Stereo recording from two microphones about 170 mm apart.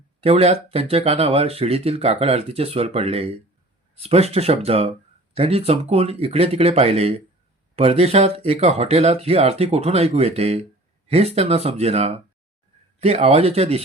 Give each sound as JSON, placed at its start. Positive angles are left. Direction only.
{"t": 0.2, "sound": "speech", "side_deg": -35}